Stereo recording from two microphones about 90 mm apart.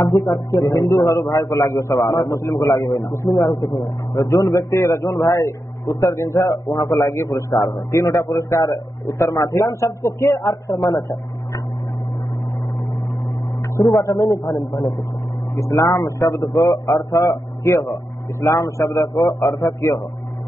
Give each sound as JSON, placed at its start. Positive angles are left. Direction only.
{"t": 0.2, "sound": "a man's voice", "side_deg": 45}
{"t": 7.1, "sound": "a man's voice", "side_deg": 30}
{"t": 13.9, "sound": "a man's voice", "side_deg": 40}
{"t": 17.6, "sound": "a man's voice", "side_deg": 30}